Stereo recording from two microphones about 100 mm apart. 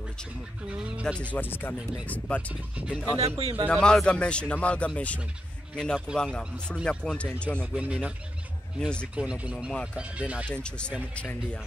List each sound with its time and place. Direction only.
0.7 s speech: 10° right (ahead or behind)
1.2 s speech: 15° left (ahead or behind)
2.7 s speech: 10° right (ahead or behind)
3.2 s speech: 90° right
3.6 s speech: 5° left (ahead or behind)
7.6 s speech: 10° right (ahead or behind)
8.7 s speech: 10° left (ahead or behind)
9.1 s speech: 10° right (ahead or behind)
10.5 s speech: 10° left (ahead or behind)